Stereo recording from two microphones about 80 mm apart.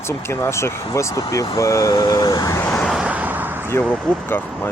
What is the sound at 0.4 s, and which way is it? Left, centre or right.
Speech, left.